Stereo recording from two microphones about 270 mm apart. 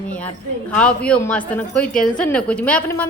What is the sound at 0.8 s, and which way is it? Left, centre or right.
A woman's voice, centre.